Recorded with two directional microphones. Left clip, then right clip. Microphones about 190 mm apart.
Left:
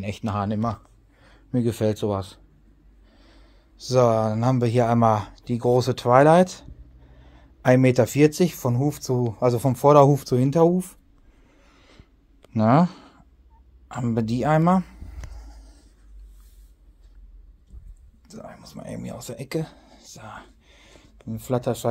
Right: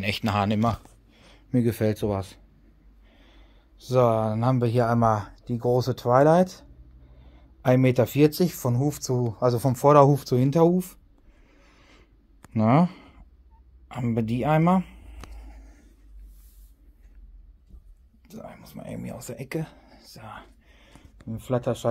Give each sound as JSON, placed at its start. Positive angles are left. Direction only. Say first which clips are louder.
{"t": 0.0, "sound": "speech", "louder": "right 4 dB", "side_deg": -5}
{"t": 1.5, "sound": "speech", "louder": "left 1 dB", "side_deg": -10}
{"t": 3.2, "sound": "snort", "louder": "left 2 dB", "side_deg": 5}
{"t": 3.9, "sound": "speech", "louder": "left 2 dB", "side_deg": 10}
{"t": 11.4, "sound": "a sound", "louder": "left 1 dB", "side_deg": -5}
{"t": 12.5, "sound": "speech", "louder": "left 3 dB", "side_deg": 0}
{"t": 15.3, "sound": "a sound", "louder": "left 1 dB", "side_deg": -20}
{"t": 18.2, "sound": "speech", "louder": "left 1 dB", "side_deg": -5}
{"t": 20.3, "sound": "a sound", "louder": "left 2 dB", "side_deg": 10}